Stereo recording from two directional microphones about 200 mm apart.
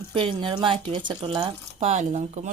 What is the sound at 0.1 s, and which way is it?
Speech, 25° right (ahead or behind).